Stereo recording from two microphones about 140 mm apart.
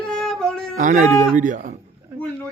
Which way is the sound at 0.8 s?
65° right (ahead or behind).